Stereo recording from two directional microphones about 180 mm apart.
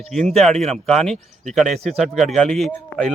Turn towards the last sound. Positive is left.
turn(degrees=0)  # may be behind; listen again after turning